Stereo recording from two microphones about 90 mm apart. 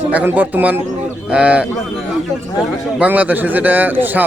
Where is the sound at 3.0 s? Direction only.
15° right (ahead or behind).